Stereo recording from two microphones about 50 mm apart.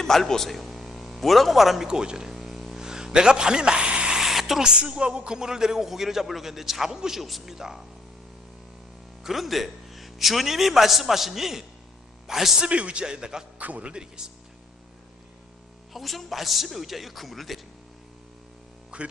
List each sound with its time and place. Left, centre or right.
0.0 s a man's voice: centre
1.9 s a man's voice: centre
2.3 s a sound: centre
4.7 s a man's voice: right
9.2 s a man's voice: centre
12.6 s a man's voice: right
13.6 s a man's voice: right
15.9 s a man's voice: centre
18.9 s speech: right